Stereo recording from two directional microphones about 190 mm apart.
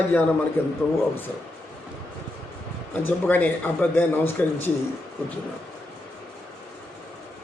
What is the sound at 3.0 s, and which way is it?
A man's voice, 10° left (ahead or behind).